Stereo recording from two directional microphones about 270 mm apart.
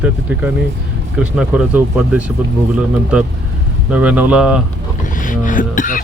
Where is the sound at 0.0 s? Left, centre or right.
Centre.